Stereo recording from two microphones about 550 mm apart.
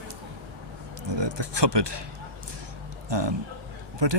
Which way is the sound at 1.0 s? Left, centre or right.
Right.